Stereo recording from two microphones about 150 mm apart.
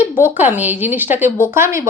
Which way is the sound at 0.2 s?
10° right (ahead or behind).